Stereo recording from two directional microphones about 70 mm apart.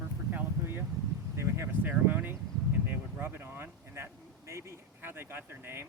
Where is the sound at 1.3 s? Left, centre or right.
Right.